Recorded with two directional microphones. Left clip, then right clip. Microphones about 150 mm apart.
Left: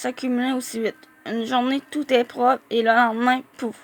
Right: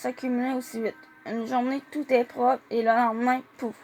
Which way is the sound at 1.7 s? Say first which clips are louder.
Left 4 dB; 50° left (ahead or behind).